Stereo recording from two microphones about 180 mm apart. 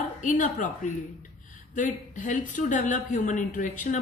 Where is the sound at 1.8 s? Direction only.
45° left (ahead or behind).